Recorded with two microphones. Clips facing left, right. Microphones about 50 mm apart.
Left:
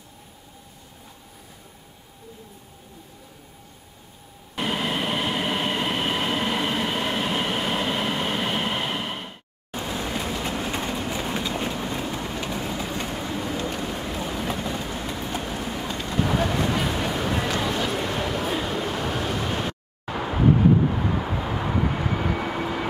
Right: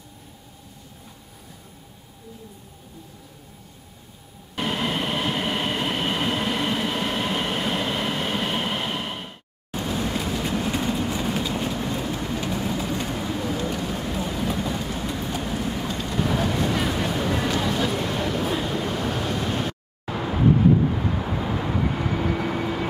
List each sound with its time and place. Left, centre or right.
4.6 s train: centre
9.8 s vehicle: centre
10.5 s train: centre
11.5 s vehicle: centre
12.5 s vehicle: centre
13.8 s a sound: centre
14.6 s vehicle: centre